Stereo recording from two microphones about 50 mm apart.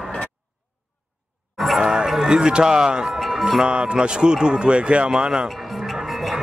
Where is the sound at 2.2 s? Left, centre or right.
Centre.